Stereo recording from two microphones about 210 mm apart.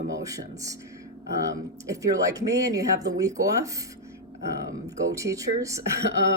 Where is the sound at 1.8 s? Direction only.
15° right (ahead or behind).